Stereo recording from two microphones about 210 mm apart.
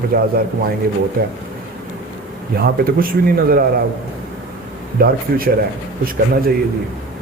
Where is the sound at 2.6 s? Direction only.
45° right (ahead or behind).